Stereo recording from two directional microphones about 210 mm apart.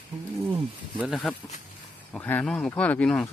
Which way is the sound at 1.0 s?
Centre (ahead or behind).